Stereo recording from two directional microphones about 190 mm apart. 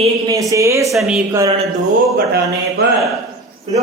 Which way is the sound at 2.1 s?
55° right (ahead or behind).